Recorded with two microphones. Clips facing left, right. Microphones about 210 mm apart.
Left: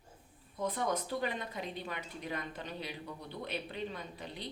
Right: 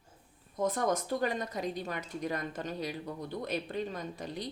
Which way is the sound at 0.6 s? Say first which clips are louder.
Right 4 dB; 45° right (ahead or behind).